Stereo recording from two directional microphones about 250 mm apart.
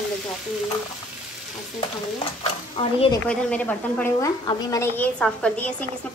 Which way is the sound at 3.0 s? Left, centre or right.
Centre.